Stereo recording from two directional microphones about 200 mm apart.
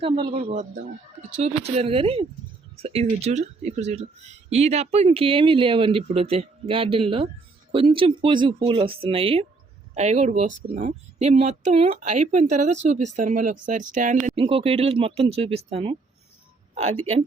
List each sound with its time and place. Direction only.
0.0 s speech: 25° right (ahead or behind)